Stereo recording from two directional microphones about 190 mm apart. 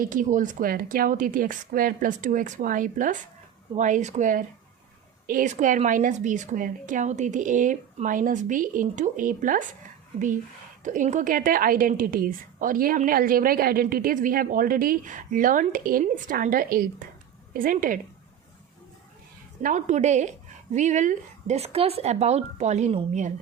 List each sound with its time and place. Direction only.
0.0 s a woman's voice: 45° right (ahead or behind)
10.8 s a woman's voice: 40° right (ahead or behind)
19.6 s speech: 40° right (ahead or behind)